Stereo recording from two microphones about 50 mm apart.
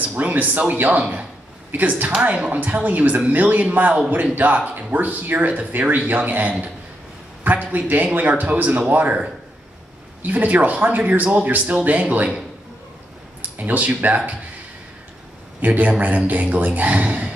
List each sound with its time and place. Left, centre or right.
0.0 s a woman's voice: right
2.5 s speech: right
10.2 s speech: right
13.6 s a woman's voice: right
15.6 s speech: right